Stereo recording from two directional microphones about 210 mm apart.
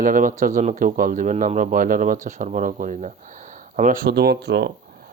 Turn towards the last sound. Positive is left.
turn(degrees=-50)  # may be behind; listen again after turning